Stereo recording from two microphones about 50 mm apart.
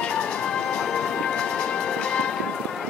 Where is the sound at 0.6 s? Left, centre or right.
Centre.